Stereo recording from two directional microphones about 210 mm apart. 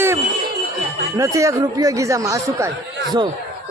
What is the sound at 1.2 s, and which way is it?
Speech, 15° right (ahead or behind).